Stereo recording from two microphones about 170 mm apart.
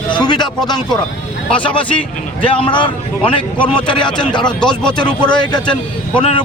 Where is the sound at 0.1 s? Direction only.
25° left (ahead or behind).